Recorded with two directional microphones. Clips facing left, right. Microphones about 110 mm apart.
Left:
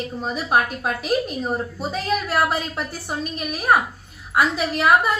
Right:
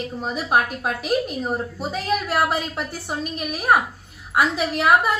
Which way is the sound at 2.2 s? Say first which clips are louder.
Even; 15° right (ahead or behind).